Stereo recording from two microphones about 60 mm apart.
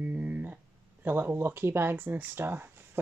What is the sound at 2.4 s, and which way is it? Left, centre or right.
Speech, right.